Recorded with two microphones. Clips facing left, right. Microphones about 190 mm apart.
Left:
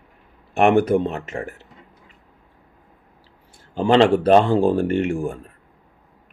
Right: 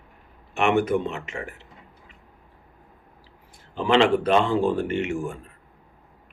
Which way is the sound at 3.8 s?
35° left (ahead or behind).